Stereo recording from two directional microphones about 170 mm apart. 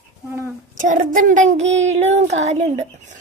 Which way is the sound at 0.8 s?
50° right (ahead or behind).